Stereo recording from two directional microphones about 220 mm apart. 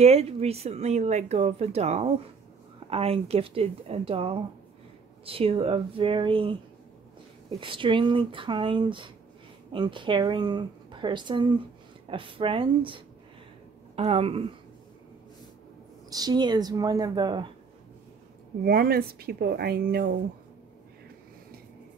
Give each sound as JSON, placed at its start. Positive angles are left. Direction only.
{"t": 0.0, "sound": "speech", "side_deg": -30}
{"t": 16.1, "sound": "a woman's voice", "side_deg": -20}
{"t": 18.6, "sound": "speech", "side_deg": -45}